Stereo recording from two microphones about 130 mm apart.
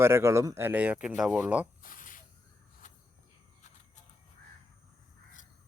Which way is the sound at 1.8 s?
90° left.